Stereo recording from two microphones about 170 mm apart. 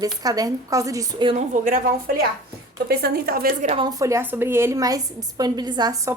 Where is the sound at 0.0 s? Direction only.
20° right (ahead or behind).